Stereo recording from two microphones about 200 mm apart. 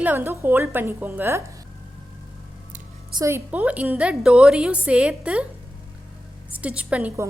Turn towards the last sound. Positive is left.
turn(degrees=-5)  # may be behind; listen again after turning